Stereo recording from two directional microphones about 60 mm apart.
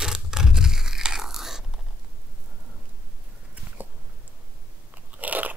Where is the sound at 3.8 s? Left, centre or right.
Right.